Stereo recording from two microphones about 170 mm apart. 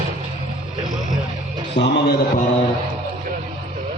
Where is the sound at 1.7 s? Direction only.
85° left.